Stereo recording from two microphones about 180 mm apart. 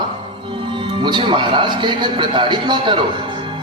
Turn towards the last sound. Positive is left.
turn(degrees=-25)  # may be behind; listen again after turning